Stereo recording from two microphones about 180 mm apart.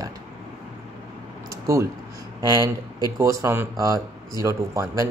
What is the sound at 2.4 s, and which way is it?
Speech, 20° right (ahead or behind).